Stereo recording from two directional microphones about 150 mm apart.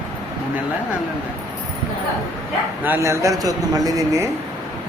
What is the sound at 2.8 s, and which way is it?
Speech, 15° right (ahead or behind).